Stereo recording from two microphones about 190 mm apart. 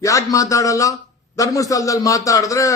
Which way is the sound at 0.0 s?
15° left (ahead or behind).